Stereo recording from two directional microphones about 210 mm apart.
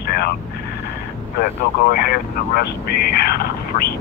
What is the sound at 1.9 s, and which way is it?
Speech, 45° left (ahead or behind).